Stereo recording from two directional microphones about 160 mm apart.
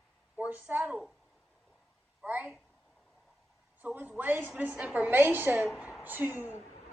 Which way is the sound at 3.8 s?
10° right (ahead or behind).